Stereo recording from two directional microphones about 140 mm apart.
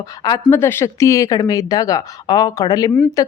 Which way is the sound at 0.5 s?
15° left (ahead or behind).